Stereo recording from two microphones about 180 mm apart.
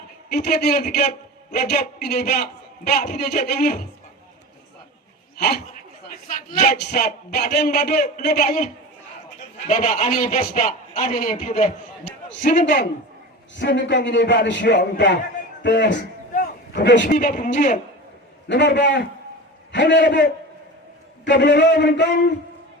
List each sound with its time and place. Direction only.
0.3 s a man's voice: 60° left (ahead or behind)
6.1 s a man's voice: 45° left (ahead or behind)
6.7 s a man's voice: 60° left (ahead or behind)
13.6 s a man's voice: 75° left (ahead or behind)
16.3 s a sound: 55° left (ahead or behind)
16.8 s a man's voice: 80° left
17.2 s a man's voice: 45° left (ahead or behind)
18.4 s a man's voice: 75° left (ahead or behind)
21.2 s a man's voice: 75° left (ahead or behind)